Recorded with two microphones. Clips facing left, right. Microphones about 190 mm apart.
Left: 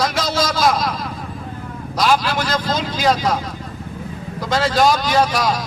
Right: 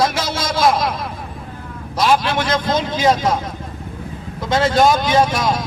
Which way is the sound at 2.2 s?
25° right (ahead or behind).